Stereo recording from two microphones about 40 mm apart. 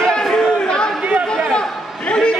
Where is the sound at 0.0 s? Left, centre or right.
Centre.